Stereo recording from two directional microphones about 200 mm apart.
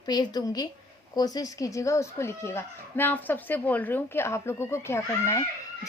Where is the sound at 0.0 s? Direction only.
20° left (ahead or behind).